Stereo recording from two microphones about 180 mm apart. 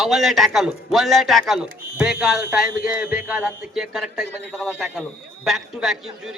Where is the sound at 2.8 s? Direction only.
5° right (ahead or behind).